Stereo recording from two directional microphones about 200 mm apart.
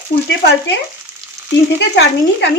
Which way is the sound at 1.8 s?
55° left (ahead or behind).